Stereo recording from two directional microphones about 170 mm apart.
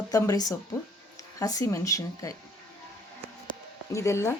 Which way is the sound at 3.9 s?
15° left (ahead or behind).